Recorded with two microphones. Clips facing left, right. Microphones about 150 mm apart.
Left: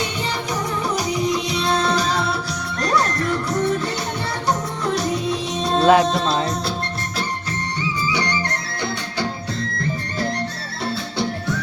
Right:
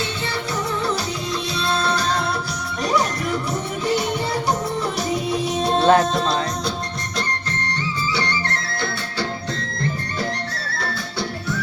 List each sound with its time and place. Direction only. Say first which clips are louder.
1.3 s music: left 3 dB; 15° left (ahead or behind)
5.8 s music: left 2 dB; 5° left (ahead or behind)
7.2 s music: right 1 dB; 10° left (ahead or behind)